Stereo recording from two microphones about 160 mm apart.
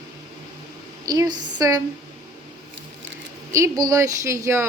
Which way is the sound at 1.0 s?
25° right (ahead or behind).